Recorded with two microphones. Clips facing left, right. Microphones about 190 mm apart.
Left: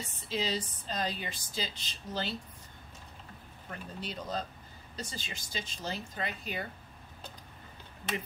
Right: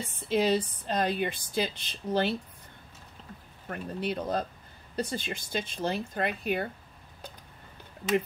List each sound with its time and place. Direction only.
0.1 s speech: 55° right (ahead or behind)
3.6 s speech: 60° right (ahead or behind)